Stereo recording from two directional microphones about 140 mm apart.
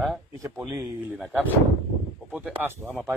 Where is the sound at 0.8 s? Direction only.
10° right (ahead or behind).